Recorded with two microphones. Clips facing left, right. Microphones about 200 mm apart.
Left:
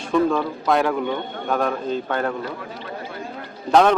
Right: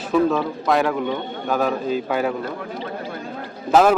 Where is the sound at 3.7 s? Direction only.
5° right (ahead or behind).